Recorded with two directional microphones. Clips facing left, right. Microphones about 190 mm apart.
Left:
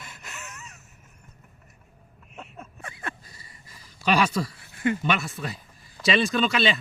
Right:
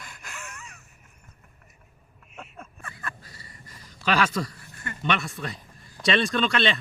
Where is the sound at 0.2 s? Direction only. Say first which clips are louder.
Right 2 dB; 5° left (ahead or behind).